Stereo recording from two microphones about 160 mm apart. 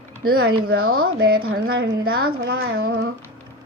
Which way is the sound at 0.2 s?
70° right (ahead or behind).